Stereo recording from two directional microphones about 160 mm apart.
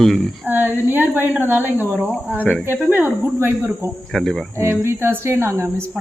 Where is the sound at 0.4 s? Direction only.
10° right (ahead or behind).